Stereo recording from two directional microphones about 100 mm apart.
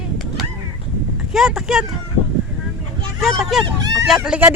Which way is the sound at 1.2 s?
5° right (ahead or behind).